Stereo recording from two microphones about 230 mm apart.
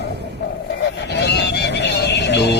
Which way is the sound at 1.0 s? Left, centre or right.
Left.